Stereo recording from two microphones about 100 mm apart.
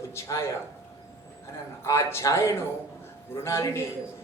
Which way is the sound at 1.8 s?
30° left (ahead or behind).